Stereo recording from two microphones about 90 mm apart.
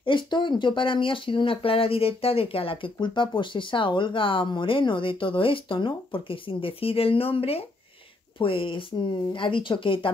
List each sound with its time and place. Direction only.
0.0 s speech: 65° left (ahead or behind); by 7.6 s 90° left
8.4 s speech: 75° left (ahead or behind)